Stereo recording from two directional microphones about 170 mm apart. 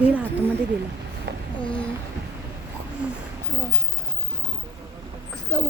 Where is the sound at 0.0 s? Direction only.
10° right (ahead or behind).